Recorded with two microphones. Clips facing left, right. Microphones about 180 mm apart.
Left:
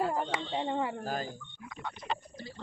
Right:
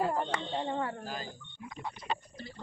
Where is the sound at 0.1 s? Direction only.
10° left (ahead or behind).